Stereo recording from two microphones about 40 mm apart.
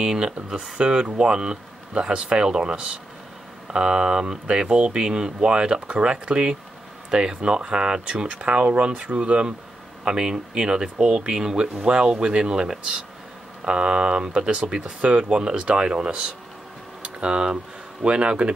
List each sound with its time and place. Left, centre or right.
0.0 s speech: centre